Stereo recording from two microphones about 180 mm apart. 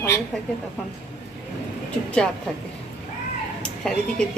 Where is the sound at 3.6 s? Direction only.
5° left (ahead or behind).